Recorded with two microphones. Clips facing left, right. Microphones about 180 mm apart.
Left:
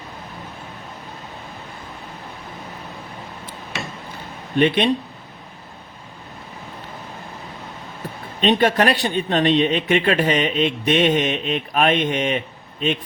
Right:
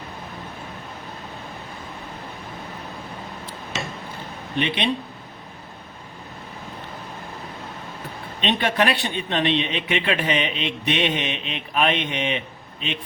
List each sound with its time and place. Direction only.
4.5 s a man's voice: 45° left (ahead or behind)
8.4 s a man's voice: 40° left (ahead or behind)